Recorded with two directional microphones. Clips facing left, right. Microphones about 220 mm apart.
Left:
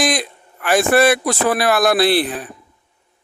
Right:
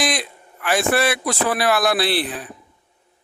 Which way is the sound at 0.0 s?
45° left (ahead or behind).